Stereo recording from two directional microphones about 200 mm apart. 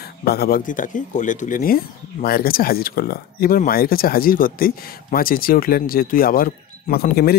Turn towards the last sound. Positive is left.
turn(degrees=50)  # may be behind; listen again after turning